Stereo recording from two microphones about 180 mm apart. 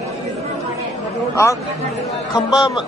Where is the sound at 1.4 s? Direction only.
15° left (ahead or behind).